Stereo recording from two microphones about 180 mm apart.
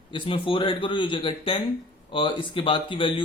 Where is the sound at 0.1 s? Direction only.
30° left (ahead or behind).